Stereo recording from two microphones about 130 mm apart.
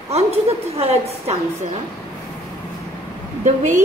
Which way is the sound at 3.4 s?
75° right (ahead or behind).